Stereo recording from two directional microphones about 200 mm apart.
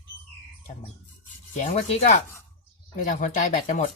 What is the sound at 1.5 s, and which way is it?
Speech, 35° left (ahead or behind).